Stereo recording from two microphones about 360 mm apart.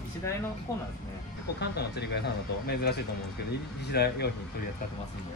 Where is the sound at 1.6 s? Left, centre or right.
Left.